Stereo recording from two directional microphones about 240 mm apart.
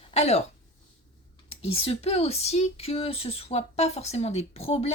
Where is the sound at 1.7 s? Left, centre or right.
Left.